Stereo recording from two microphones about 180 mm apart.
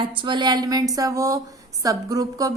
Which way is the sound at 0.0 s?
25° right (ahead or behind).